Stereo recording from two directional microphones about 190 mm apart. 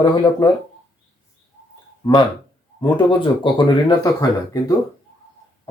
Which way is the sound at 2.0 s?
25° left (ahead or behind).